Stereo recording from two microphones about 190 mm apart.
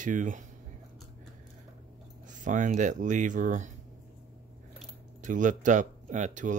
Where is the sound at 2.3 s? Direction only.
40° right (ahead or behind).